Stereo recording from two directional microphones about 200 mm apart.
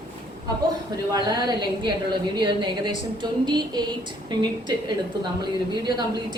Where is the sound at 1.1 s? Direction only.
20° right (ahead or behind).